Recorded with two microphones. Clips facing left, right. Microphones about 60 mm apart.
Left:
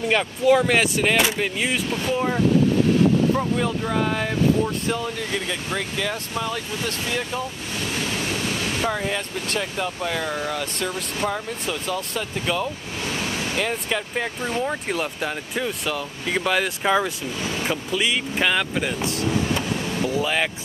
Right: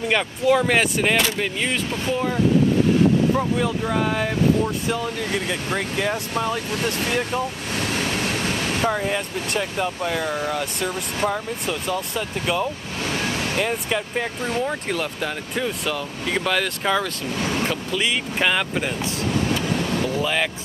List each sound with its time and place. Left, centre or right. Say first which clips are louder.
0.1 s speech: left 1 dB; centre
3.3 s speech: right 1 dB; centre
8.8 s speech: right 3 dB; centre
17.6 s speech: even; centre
19.8 s vehicle: right 2 dB; right
20.1 s speech: left 3 dB; centre